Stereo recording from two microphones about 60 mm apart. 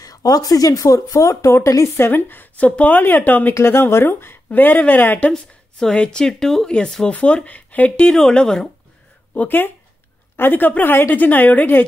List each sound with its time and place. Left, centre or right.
0.0 s speech: left
1.4 s speech: left
2.0 s a woman's voice: left
3.5 s speech: left
4.5 s speech: left
5.3 s speech: centre
8.1 s speech: centre
9.3 s a woman's voice: left